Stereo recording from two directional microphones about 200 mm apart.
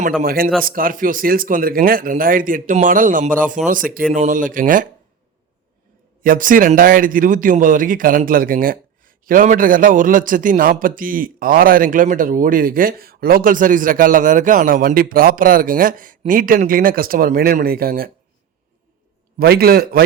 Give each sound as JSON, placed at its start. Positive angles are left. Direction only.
{"t": 0.2, "sound": "speech", "side_deg": -45}
{"t": 6.2, "sound": "speech", "side_deg": -45}
{"t": 19.4, "sound": "speech", "side_deg": -50}